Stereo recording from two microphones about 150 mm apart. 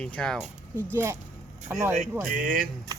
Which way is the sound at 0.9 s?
20° right (ahead or behind).